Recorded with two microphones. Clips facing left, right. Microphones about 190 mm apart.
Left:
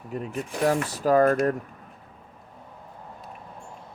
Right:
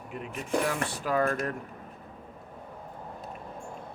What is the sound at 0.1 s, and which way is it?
Speech, 40° left (ahead or behind).